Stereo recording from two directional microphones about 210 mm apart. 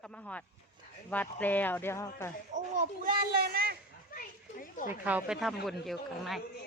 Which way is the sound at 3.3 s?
45° right (ahead or behind).